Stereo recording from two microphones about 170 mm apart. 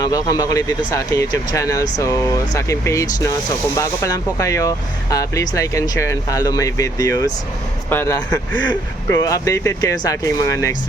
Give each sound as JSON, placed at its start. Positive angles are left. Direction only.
{"t": 0.0, "sound": "speech", "side_deg": 20}